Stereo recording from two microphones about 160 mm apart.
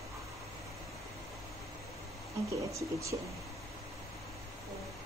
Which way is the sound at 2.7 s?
20° right (ahead or behind).